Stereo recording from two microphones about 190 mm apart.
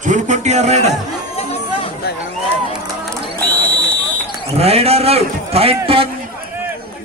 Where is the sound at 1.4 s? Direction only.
35° left (ahead or behind).